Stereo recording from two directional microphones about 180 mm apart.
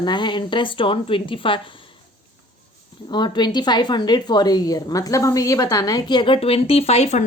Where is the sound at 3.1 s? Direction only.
25° left (ahead or behind).